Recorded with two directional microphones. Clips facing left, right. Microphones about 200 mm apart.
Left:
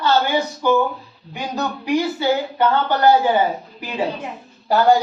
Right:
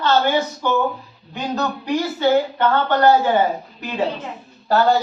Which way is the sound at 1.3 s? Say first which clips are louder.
Right 1 dB; 10° left (ahead or behind).